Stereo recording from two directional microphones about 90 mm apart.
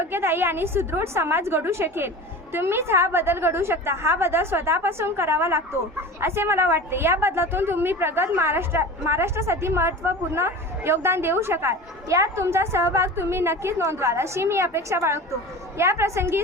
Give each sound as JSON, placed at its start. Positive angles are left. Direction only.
{"t": 0.0, "sound": "a woman's voice", "side_deg": -25}